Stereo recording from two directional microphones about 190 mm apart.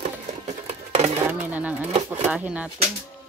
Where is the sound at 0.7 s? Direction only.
35° right (ahead or behind).